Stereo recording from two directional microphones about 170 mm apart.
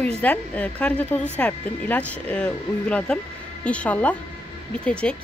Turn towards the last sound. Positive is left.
turn(degrees=5)  # may be behind; listen again after turning